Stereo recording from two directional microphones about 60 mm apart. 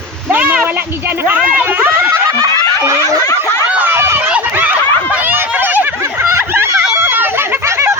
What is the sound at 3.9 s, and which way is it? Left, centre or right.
Run, right.